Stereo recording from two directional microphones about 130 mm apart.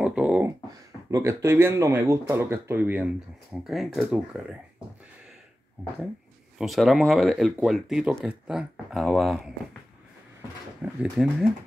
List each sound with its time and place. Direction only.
0.0 s a sound: 10° right (ahead or behind)
1.1 s speech: 20° right (ahead or behind)
3.6 s speech: centre (ahead or behind)
6.6 s speech: centre (ahead or behind)
10.8 s speech: 10° right (ahead or behind)